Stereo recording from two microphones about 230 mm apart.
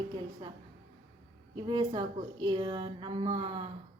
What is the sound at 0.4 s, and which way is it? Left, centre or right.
A woman's voice, centre.